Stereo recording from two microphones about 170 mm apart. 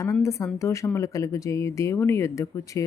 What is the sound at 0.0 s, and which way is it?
Speech, 20° left (ahead or behind).